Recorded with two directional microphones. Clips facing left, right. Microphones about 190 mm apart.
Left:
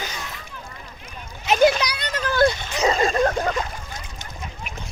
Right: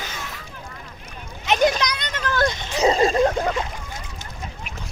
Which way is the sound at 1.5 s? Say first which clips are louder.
Left 2 dB; 5° left (ahead or behind).